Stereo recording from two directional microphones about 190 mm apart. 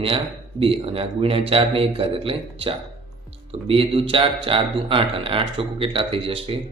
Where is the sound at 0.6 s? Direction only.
30° right (ahead or behind).